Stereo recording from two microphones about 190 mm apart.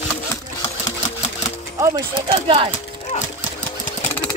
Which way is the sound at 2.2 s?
30° right (ahead or behind).